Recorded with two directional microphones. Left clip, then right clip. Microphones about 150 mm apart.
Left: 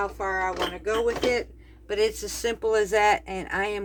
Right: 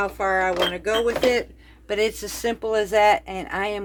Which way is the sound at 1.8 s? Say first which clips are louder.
Right 2 dB; 50° right (ahead or behind).